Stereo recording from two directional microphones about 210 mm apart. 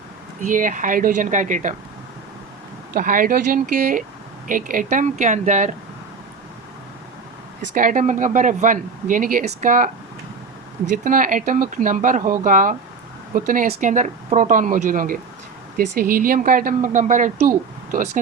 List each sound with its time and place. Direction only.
0.4 s speech: 40° right (ahead or behind)
2.9 s speech: 40° right (ahead or behind)
7.7 s speech: 40° right (ahead or behind)
10.9 s speech: 40° right (ahead or behind)